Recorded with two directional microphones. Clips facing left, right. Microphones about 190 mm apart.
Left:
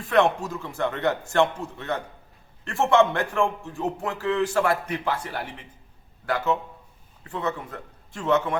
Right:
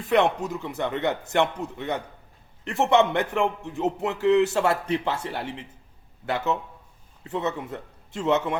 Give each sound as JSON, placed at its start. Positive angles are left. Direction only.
{"t": 0.1, "sound": "a man's voice", "side_deg": -20}